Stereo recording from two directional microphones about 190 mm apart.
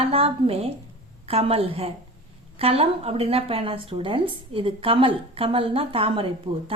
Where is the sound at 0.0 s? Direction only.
30° right (ahead or behind).